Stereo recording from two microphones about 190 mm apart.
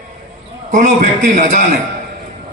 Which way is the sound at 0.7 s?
40° right (ahead or behind).